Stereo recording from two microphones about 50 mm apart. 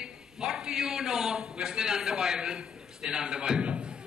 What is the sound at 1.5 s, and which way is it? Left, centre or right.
A man's voice, centre.